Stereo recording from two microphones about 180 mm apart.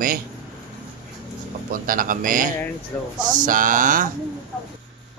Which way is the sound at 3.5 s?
50° right (ahead or behind).